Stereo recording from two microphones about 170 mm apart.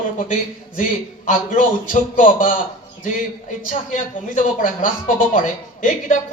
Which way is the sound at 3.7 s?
50° left (ahead or behind).